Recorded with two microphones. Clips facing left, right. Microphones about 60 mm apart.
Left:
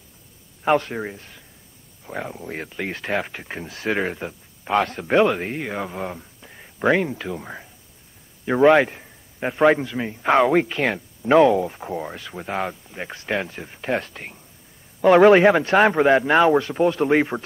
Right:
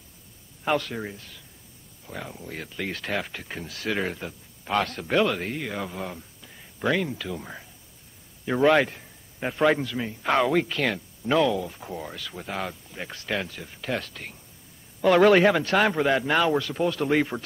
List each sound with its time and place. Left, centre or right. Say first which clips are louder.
0.7 s a man's voice: left 6 dB; left